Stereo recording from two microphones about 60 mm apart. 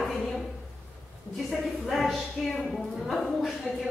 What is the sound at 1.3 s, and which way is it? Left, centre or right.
A woman's voice, centre.